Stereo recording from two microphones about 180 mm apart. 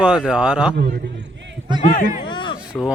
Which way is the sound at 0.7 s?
60° right (ahead or behind).